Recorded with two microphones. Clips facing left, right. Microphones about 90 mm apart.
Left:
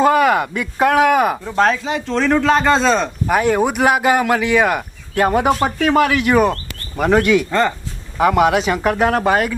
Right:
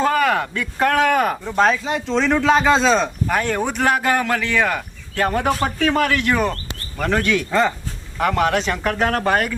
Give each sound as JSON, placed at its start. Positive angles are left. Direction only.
{"t": 0.0, "sound": "speech", "side_deg": 10}
{"t": 3.2, "sound": "speech", "side_deg": 10}